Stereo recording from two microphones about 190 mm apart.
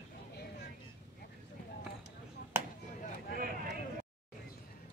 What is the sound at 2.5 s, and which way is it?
Chop, 10° right (ahead or behind).